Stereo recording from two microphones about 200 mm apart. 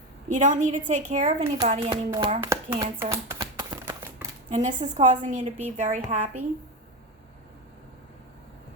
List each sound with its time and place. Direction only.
0.3 s a woman's voice: 40° right (ahead or behind); by 3.9 s 20° right (ahead or behind)
4.4 s a woman's voice: 35° right (ahead or behind)